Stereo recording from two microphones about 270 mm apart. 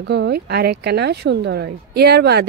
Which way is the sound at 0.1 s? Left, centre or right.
Right.